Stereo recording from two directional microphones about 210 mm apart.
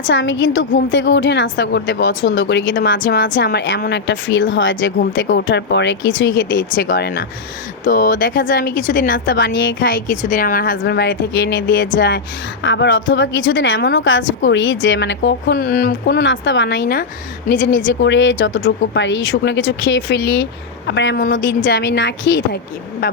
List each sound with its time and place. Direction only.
0.1 s a woman's voice: 60° left (ahead or behind)
3.0 s a woman's voice: 40° left (ahead or behind)
7.9 s a woman's voice: 40° left (ahead or behind)
9.3 s a woman's voice: 65° left (ahead or behind)
9.9 s a woman's voice: 40° left (ahead or behind)
17.7 s a woman's voice: 60° left (ahead or behind)